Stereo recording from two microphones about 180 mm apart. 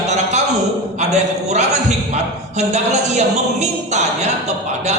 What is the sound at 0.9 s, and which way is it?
A man's voice, 40° right (ahead or behind).